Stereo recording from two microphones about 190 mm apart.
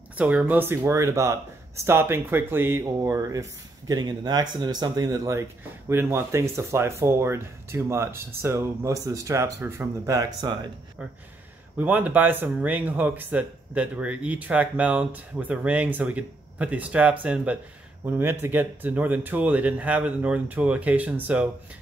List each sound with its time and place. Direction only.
0.2 s speech: 5° right (ahead or behind)
11.8 s speech: 10° right (ahead or behind)